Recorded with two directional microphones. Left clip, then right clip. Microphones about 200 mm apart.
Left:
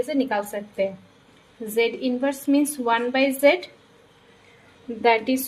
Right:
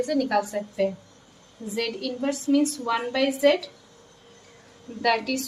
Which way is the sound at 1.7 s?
55° left (ahead or behind).